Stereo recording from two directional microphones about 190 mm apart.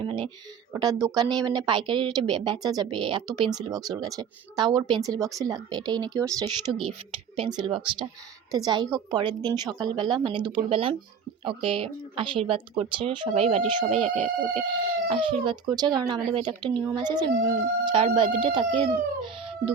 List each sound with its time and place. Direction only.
0.0 s speech: 25° right (ahead or behind)